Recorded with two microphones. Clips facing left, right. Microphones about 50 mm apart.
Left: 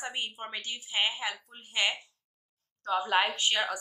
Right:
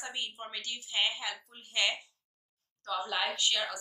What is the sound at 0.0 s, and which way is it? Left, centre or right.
A woman's voice, left.